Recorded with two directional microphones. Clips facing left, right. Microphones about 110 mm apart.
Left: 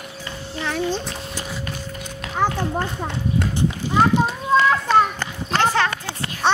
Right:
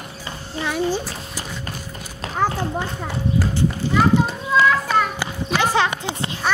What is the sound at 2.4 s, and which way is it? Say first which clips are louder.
Speech: even; 5° right (ahead or behind).